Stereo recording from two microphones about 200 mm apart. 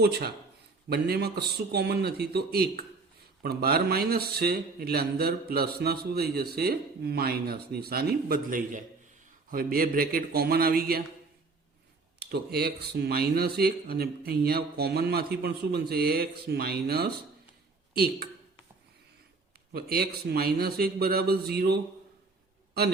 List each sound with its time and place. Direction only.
0.0 s a man's voice: 50° right (ahead or behind)
12.2 s a man's voice: 55° right (ahead or behind)
19.7 s a man's voice: 50° right (ahead or behind)